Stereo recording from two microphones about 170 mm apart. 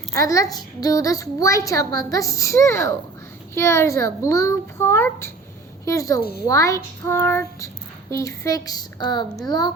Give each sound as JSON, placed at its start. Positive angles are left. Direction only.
{"t": 0.1, "sound": "a child's voice", "side_deg": 20}